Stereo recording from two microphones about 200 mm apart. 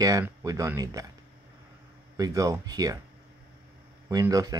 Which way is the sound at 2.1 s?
15° right (ahead or behind).